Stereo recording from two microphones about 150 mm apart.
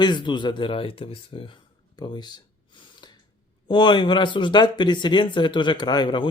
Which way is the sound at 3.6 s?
30° left (ahead or behind).